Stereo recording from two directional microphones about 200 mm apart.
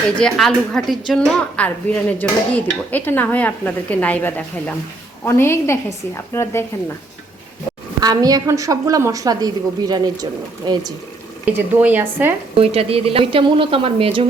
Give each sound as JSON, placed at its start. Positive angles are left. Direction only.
{"t": 0.2, "sound": "a woman's voice", "side_deg": 0}
{"t": 8.0, "sound": "a woman's voice", "side_deg": -20}
{"t": 11.4, "sound": "a woman's voice", "side_deg": -10}
{"t": 12.5, "sound": "a woman's voice", "side_deg": -30}